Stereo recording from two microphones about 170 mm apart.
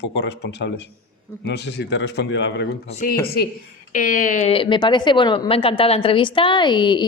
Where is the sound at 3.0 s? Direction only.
50° left (ahead or behind).